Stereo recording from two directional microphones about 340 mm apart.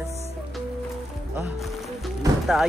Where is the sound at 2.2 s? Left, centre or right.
Centre.